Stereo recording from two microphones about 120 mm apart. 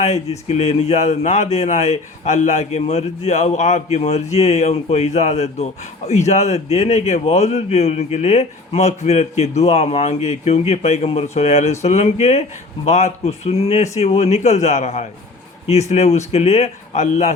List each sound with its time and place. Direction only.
0.0 s a man's voice: 65° left (ahead or behind)